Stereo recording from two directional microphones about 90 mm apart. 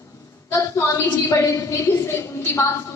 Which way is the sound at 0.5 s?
35° left (ahead or behind).